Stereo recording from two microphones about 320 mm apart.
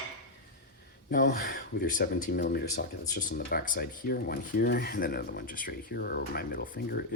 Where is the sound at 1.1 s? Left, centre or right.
Left.